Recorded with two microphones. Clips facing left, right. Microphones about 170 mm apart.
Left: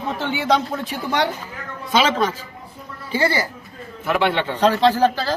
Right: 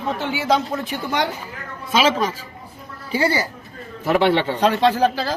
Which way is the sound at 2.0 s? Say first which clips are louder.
Even; 10° right (ahead or behind).